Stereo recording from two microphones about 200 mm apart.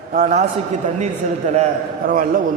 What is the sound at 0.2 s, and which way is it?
Mantra, 35° right (ahead or behind).